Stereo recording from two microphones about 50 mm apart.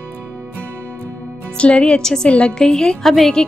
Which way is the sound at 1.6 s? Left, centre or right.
Left.